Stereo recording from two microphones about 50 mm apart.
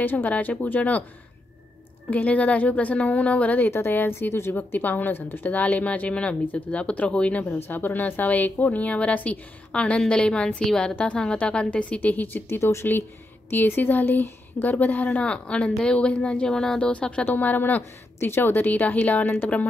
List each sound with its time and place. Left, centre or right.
0.0 s a woman's voice: left
2.0 s a woman's voice: left
3.6 s a woman's voice: left
4.7 s a woman's voice: left
7.4 s a woman's voice: left; by 11.0 s centre
11.0 s a woman's voice: left
12.4 s speech: left
15.1 s a woman's voice: left
18.2 s speech: left